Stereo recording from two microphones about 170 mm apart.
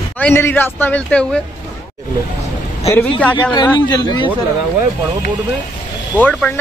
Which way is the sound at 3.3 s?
25° left (ahead or behind).